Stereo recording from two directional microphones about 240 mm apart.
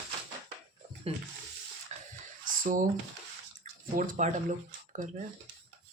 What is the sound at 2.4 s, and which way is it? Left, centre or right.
Squish, right.